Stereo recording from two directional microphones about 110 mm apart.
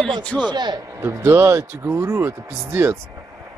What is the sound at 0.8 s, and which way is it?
Speech, 25° right (ahead or behind).